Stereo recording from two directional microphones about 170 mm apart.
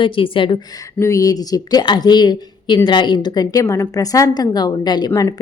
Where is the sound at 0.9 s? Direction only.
20° left (ahead or behind).